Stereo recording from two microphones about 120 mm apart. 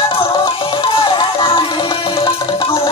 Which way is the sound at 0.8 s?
45° left (ahead or behind).